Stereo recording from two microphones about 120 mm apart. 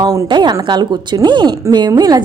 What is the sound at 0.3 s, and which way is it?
A woman's voice, 40° right (ahead or behind).